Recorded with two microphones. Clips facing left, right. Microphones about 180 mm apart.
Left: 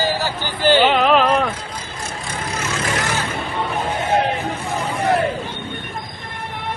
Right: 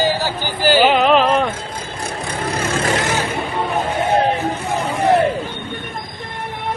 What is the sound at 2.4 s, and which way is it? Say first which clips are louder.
Vehicle: right 5 dB; 35° right (ahead or behind).